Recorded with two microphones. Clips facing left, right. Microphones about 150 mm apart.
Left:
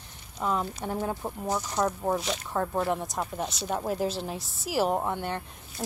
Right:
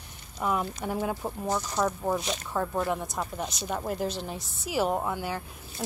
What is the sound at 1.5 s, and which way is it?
Speech, 10° left (ahead or behind).